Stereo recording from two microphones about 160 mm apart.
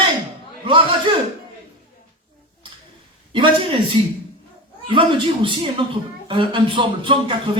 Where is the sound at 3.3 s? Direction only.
30° right (ahead or behind).